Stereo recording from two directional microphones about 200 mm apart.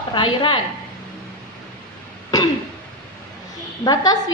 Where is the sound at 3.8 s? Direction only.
20° left (ahead or behind).